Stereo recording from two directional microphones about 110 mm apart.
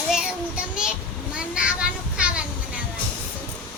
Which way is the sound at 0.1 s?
5° right (ahead or behind).